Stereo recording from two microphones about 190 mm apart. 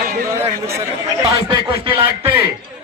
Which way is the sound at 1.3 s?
25° right (ahead or behind).